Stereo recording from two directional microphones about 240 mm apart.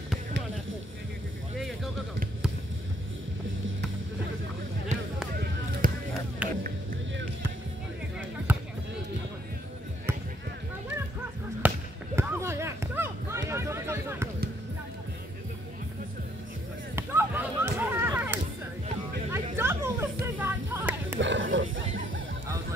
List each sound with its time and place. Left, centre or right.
1.6 s music: centre
5.3 s basketball bounce: right
6.4 s music: centre
8.5 s basketball bounce: centre
11.6 s basketball bounce: centre
12.2 s run: centre
16.9 s a sound: centre
19.5 s music: centre
21.2 s a sound: right